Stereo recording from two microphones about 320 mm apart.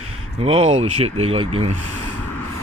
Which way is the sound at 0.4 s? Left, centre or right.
Centre.